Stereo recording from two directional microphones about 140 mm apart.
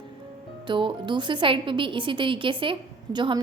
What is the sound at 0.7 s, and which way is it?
A woman's voice, 35° right (ahead or behind).